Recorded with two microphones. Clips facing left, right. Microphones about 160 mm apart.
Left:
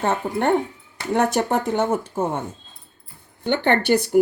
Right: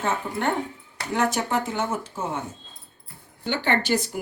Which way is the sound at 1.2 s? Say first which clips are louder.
Left 4 dB; 55° left (ahead or behind).